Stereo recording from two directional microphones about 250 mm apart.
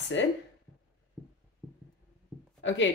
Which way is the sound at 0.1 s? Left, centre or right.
Left.